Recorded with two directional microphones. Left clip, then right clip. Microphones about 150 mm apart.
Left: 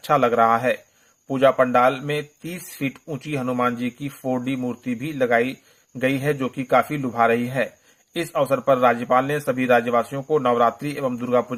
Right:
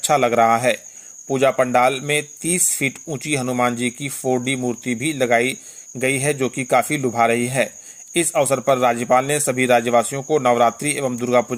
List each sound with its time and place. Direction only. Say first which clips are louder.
0.0 s a man's voice: right 2 dB; 30° right (ahead or behind)